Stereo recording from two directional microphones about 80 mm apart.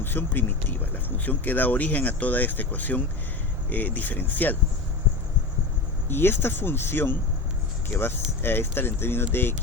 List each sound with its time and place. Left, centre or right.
0.0 s speech: left
6.1 s speech: left
8.4 s speech: left